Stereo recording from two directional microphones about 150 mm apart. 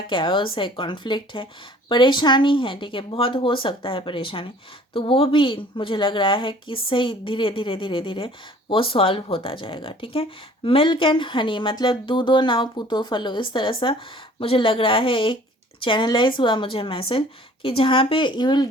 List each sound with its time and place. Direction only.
0.1 s speech: 35° left (ahead or behind)